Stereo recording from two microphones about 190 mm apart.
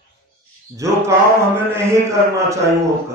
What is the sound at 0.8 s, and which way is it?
A man's voice, 15° right (ahead or behind).